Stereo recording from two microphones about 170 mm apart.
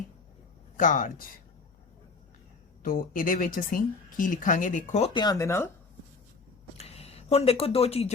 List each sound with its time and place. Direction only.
0.8 s speech: 50° left (ahead or behind)
2.8 s speech: 55° left (ahead or behind)
5.1 s speech: 25° left (ahead or behind)
6.7 s speech: 35° left (ahead or behind)